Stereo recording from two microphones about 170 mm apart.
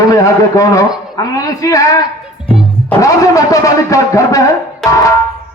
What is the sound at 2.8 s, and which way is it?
Speech, 20° left (ahead or behind).